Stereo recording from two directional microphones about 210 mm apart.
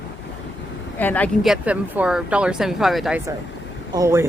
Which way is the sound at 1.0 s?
5° left (ahead or behind).